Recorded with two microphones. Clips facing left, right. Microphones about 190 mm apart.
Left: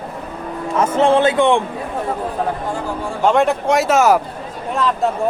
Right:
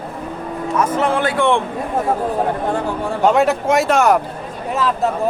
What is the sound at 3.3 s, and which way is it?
Speech, 5° right (ahead or behind).